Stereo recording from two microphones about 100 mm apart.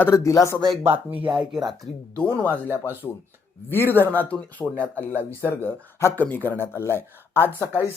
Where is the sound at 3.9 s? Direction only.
20° left (ahead or behind).